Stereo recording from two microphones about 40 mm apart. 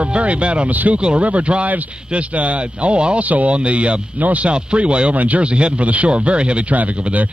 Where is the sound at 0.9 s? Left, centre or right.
Right.